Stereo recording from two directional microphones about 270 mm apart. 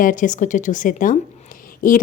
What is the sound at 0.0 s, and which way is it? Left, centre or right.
Speech, left.